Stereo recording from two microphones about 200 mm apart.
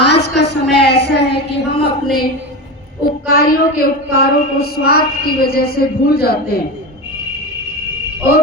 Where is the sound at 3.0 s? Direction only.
50° left (ahead or behind).